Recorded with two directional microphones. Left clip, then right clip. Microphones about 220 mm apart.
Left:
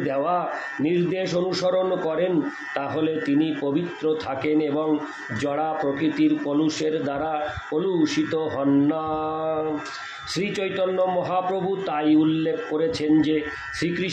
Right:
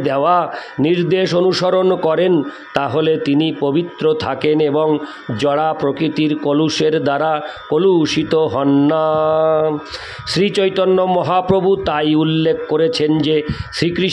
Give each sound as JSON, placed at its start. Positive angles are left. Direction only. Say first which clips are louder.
{"t": 0.0, "sound": "a man's voice", "louder": "right 9 dB", "side_deg": -50}